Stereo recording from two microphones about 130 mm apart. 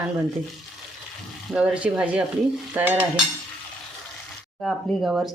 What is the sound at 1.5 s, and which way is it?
A woman's voice, 5° right (ahead or behind).